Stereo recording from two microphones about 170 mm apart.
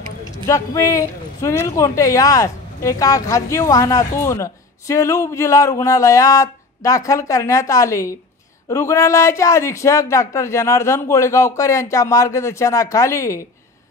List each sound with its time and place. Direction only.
0.5 s speech: 20° left (ahead or behind)